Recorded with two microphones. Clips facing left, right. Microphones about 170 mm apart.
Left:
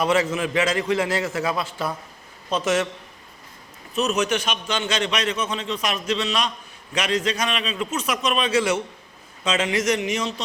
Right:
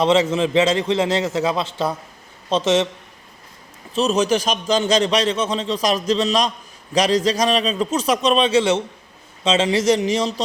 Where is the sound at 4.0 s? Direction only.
30° right (ahead or behind).